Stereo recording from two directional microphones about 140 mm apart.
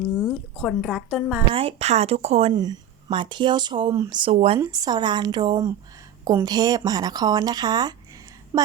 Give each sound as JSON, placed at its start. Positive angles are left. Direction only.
{"t": 0.2, "sound": "a woman's voice", "side_deg": 0}
{"t": 1.5, "sound": "speech", "side_deg": -45}
{"t": 2.5, "sound": "speech", "side_deg": -30}
{"t": 4.6, "sound": "speech", "side_deg": -25}
{"t": 8.5, "sound": "a sound", "side_deg": -15}